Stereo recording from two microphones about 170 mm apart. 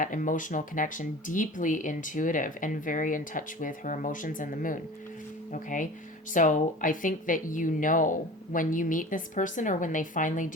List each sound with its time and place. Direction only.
0.0 s speech: 50° left (ahead or behind)